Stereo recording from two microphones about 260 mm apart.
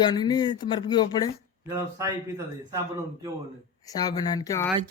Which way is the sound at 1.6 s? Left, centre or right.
Centre.